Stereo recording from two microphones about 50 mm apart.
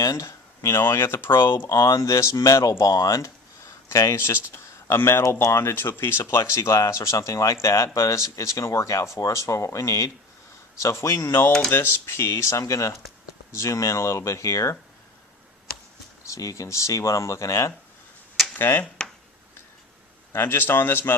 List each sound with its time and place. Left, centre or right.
0.2 s a sound: left
0.9 s speech: left
1.5 s speech: left
4.2 s speech: left
6.3 s speech: left
7.9 s speech: left
11.7 s speech: left
16.2 s speech: left
18.5 s speech: left
20.3 s speech: left